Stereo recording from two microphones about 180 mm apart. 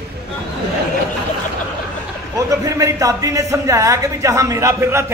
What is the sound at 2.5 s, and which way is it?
Speech, 20° right (ahead or behind).